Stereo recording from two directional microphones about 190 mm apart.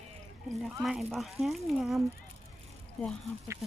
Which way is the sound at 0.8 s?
Centre (ahead or behind).